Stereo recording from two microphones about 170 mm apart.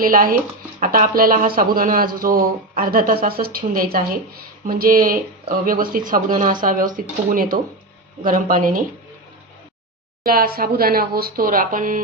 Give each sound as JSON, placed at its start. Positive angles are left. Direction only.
{"t": 0.0, "sound": "a man's voice", "side_deg": -55}
{"t": 10.2, "sound": "a man's voice", "side_deg": -60}